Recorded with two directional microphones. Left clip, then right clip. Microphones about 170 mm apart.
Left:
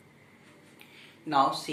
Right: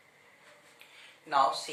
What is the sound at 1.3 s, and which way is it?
Speech, 20° left (ahead or behind).